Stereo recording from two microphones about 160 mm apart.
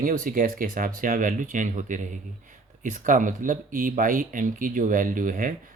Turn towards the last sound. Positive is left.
turn(degrees=-55)  # may be behind; listen again after turning